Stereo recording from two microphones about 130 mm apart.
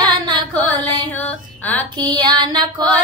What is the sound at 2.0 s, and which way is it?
Female singing, 35° right (ahead or behind).